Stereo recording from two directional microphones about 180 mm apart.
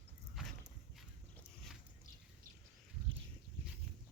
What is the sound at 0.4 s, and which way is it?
Dog, 5° right (ahead or behind).